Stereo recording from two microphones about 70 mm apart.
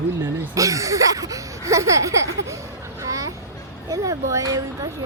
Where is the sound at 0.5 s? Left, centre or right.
Right.